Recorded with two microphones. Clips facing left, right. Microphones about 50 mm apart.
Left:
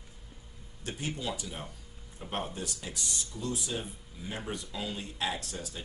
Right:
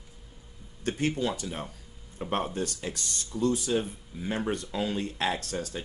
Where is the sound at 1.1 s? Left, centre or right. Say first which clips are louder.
Right 6 dB; right.